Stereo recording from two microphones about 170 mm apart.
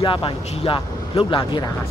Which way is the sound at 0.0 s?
30° left (ahead or behind).